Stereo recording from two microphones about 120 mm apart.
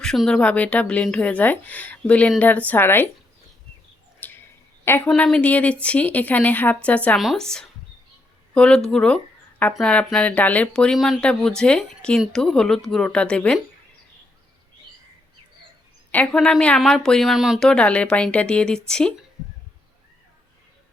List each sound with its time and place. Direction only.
0.0 s a woman's voice: 5° left (ahead or behind)
4.2 s a sound: 15° left (ahead or behind)
5.0 s a woman's voice: 10° left (ahead or behind)
7.2 s speech: centre (ahead or behind)
16.1 s a woman's voice: 5° left (ahead or behind)